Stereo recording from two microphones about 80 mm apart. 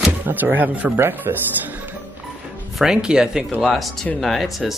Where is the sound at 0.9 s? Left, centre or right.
Right.